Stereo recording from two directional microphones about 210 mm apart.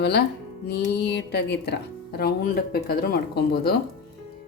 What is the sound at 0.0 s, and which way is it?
A woman's voice, 50° left (ahead or behind).